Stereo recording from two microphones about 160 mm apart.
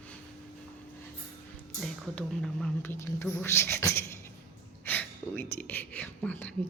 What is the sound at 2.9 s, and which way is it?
Speech, 15° left (ahead or behind).